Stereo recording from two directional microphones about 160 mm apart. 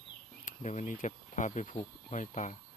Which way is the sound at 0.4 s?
50° left (ahead or behind).